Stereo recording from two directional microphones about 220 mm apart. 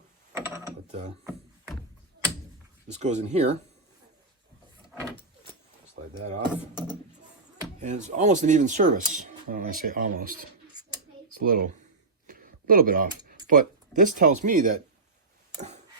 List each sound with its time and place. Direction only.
0.9 s speech: 30° right (ahead or behind)
3.0 s speech: 30° right (ahead or behind)
7.8 s speech: 30° right (ahead or behind)
11.3 s speech: 40° right (ahead or behind)